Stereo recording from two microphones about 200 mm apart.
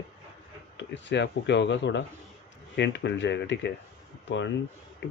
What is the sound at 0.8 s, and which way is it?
Speech, 65° left (ahead or behind).